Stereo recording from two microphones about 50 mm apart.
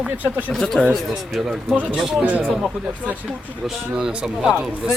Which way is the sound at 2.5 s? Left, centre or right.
Centre.